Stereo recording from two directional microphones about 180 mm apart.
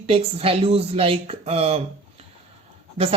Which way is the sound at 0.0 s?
35° right (ahead or behind).